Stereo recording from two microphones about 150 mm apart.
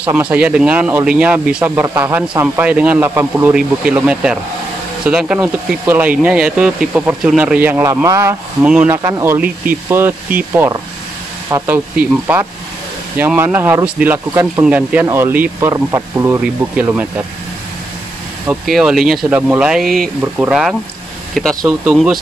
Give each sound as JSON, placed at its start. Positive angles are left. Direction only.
{"t": 0.1, "sound": "speech", "side_deg": -10}
{"t": 18.7, "sound": "speech", "side_deg": 0}